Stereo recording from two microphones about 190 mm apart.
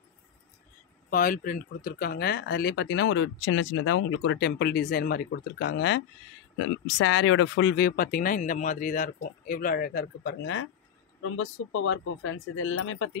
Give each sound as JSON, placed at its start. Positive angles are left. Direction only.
{"t": 1.1, "sound": "speech", "side_deg": 45}
{"t": 7.0, "sound": "speech", "side_deg": 90}
{"t": 11.2, "sound": "speech", "side_deg": 90}